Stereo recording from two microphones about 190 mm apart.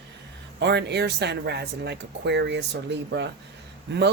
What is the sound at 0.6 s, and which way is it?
Speech, 65° right (ahead or behind).